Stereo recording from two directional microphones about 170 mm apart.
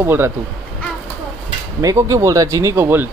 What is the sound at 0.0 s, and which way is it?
Speech, 15° right (ahead or behind).